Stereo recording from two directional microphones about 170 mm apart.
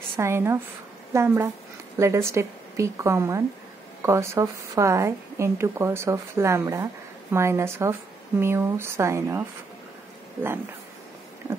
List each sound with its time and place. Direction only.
0.2 s a woman's voice: 15° right (ahead or behind)